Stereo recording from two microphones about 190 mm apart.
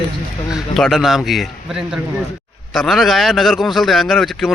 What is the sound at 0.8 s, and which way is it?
A man's voice, centre (ahead or behind).